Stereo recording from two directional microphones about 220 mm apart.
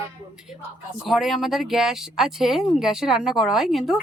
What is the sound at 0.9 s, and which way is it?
Speech, centre (ahead or behind).